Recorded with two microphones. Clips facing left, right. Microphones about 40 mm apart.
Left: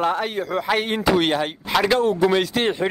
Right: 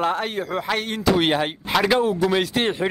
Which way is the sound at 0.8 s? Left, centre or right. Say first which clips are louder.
Left 1 dB; centre.